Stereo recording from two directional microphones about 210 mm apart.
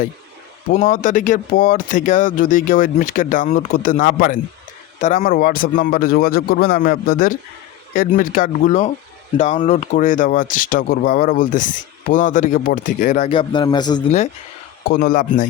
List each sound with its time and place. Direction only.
0.7 s a man's voice: 40° left (ahead or behind); by 14.0 s 20° left (ahead or behind)
14.8 s speech: 45° left (ahead or behind)